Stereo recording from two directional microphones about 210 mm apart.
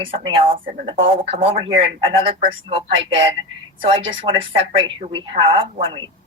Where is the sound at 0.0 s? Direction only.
25° right (ahead or behind).